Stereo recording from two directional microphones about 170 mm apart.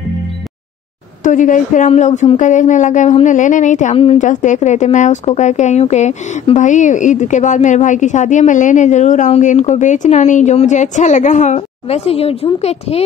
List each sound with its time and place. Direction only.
1.2 s a woman's voice: 50° left (ahead or behind)